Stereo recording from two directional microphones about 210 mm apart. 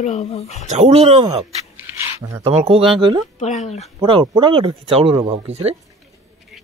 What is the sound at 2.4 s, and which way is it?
Speech, 25° right (ahead or behind).